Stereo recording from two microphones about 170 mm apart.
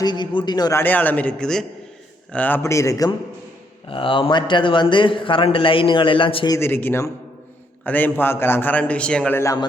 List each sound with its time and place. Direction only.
0.0 s a man's voice: 25° left (ahead or behind)
3.8 s a man's voice: 30° left (ahead or behind)
6.6 s a man's voice: 10° left (ahead or behind)